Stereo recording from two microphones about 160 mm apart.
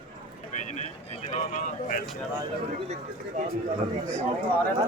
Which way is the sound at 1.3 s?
50° left (ahead or behind).